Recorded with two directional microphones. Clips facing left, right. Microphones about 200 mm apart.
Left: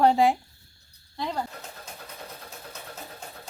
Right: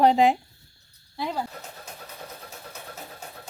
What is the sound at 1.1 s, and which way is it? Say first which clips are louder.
Speech: right 1 dB; 5° right (ahead or behind).